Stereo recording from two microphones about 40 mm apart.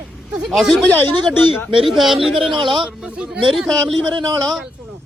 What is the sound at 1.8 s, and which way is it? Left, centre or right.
Speech, centre.